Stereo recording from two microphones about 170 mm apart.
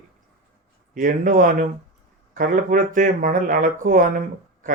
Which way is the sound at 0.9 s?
55° right (ahead or behind).